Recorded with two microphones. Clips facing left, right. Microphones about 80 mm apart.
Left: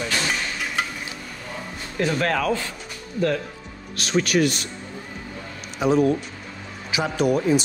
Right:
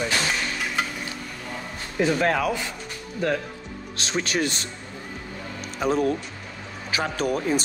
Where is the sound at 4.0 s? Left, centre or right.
Right.